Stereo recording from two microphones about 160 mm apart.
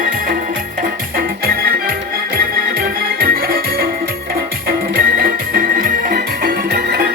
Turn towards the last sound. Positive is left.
turn(degrees=-75)  # may be behind; listen again after turning